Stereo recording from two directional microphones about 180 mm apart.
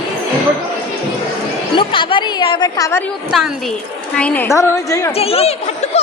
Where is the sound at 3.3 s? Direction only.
Centre (ahead or behind); by 5.1 s 15° left (ahead or behind).